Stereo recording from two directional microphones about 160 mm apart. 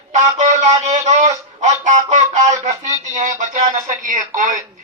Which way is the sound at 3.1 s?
50° right (ahead or behind).